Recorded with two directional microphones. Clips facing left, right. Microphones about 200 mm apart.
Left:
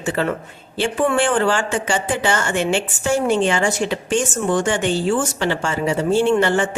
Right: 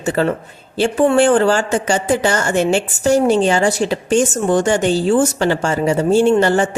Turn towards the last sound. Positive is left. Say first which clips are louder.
# right 3 dB
turn(degrees=-40)  # may be behind; listen again after turning